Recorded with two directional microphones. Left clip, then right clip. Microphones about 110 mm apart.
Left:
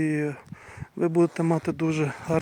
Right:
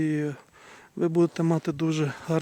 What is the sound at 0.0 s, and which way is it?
Speech, 15° right (ahead or behind).